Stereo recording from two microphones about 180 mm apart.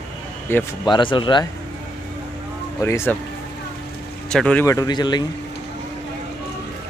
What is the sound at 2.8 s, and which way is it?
Speech, 15° left (ahead or behind).